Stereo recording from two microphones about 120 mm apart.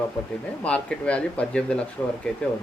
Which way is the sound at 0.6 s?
10° left (ahead or behind).